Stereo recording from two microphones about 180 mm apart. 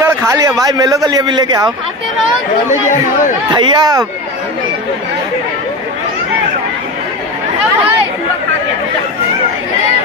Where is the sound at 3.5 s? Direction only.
25° right (ahead or behind).